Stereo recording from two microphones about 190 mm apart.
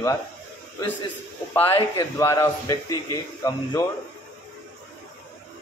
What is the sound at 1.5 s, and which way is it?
A man's voice, 10° left (ahead or behind).